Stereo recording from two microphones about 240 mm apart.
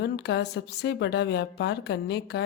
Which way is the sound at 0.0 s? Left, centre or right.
Left.